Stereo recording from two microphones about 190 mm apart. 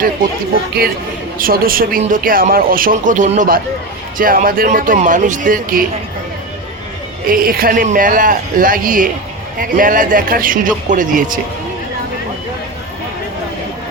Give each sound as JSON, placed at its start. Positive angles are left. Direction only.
{"t": 1.4, "sound": "speech", "side_deg": -50}
{"t": 7.3, "sound": "speech", "side_deg": -50}